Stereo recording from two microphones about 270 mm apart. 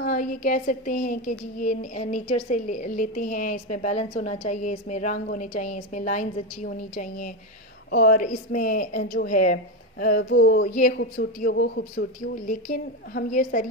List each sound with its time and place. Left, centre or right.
0.0 s a woman's voice: left